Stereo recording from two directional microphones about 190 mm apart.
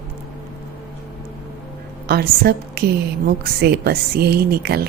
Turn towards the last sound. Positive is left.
turn(degrees=-55)  # may be behind; listen again after turning